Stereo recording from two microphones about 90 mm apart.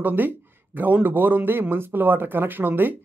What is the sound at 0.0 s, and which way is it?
Speech, 20° right (ahead or behind).